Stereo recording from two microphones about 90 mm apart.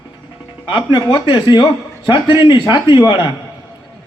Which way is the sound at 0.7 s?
60° left (ahead or behind).